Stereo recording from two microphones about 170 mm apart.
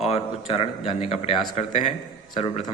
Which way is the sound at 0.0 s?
35° left (ahead or behind).